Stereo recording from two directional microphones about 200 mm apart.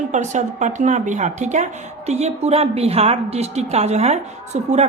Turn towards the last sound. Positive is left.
turn(degrees=-35)  # may be behind; listen again after turning